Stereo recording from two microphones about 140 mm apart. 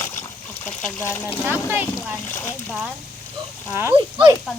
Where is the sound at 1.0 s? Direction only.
15° left (ahead or behind).